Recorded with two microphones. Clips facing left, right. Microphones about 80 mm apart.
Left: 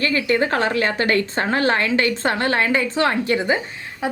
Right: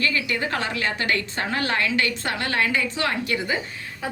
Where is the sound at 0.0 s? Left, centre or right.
Left.